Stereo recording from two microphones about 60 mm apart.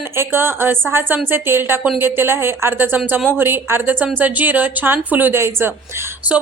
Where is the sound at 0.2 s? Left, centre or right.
Right.